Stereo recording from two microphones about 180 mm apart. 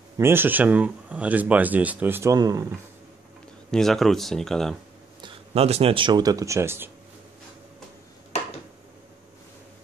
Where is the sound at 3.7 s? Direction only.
Centre (ahead or behind).